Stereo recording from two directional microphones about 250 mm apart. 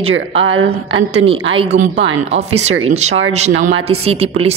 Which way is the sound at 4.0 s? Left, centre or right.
Right.